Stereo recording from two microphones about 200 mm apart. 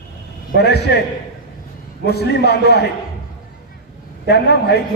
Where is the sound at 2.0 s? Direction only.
55° left (ahead or behind).